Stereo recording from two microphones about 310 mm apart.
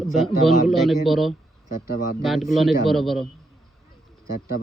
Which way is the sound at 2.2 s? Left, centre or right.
Centre.